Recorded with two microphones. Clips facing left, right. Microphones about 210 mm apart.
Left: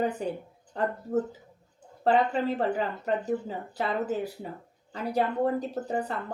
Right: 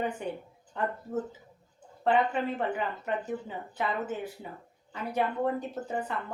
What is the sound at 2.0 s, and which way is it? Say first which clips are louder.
Speech: left 2 dB; 35° left (ahead or behind).